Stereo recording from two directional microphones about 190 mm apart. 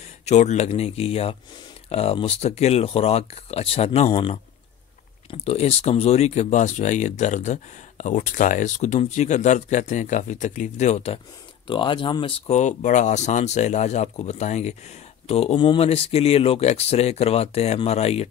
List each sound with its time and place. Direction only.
0.2 s speech: 35° left (ahead or behind)